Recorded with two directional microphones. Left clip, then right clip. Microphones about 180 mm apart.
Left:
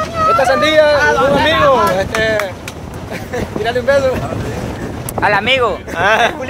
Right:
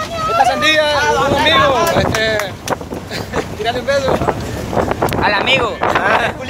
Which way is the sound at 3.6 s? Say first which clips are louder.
Left 4 dB; 20° left (ahead or behind).